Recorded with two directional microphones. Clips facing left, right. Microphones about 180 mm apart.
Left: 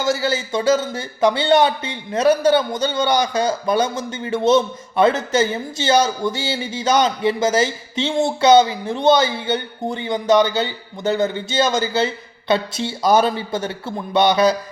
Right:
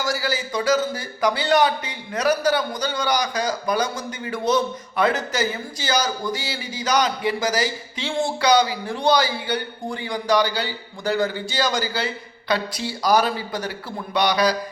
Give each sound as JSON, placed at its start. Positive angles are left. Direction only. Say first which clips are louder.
{"t": 0.0, "sound": "speech", "louder": "left 5 dB", "side_deg": 25}